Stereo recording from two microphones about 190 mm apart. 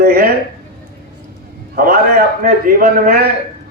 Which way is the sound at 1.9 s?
55° right (ahead or behind).